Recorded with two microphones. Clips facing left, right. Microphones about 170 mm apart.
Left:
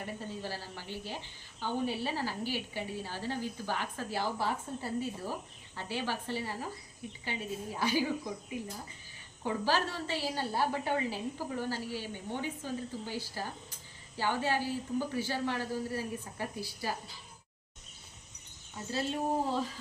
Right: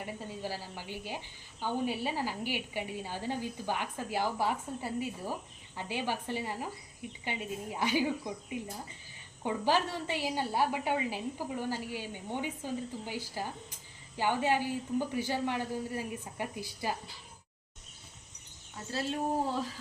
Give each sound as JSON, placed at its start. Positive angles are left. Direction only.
{"t": 0.0, "sound": "a woman's voice", "side_deg": -10}
{"t": 18.9, "sound": "speech", "side_deg": 0}